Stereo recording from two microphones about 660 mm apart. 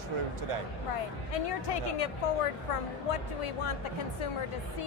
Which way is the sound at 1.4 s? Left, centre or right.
Left.